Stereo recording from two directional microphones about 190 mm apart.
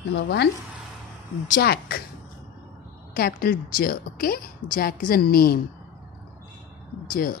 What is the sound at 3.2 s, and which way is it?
A woman's voice, 50° left (ahead or behind).